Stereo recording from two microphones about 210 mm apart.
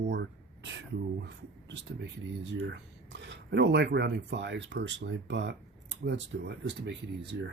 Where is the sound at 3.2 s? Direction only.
55° right (ahead or behind).